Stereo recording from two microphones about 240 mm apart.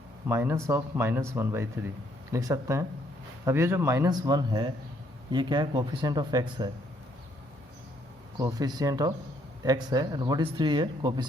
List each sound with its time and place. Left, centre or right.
0.3 s speech: centre
8.4 s speech: centre